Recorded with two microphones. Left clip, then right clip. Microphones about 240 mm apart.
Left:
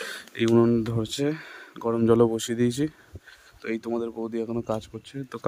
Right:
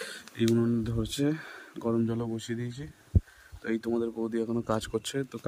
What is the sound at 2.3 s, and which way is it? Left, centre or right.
Speech, centre.